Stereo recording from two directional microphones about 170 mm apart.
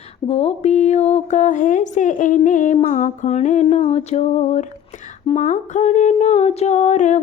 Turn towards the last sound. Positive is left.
turn(degrees=45)  # may be behind; listen again after turning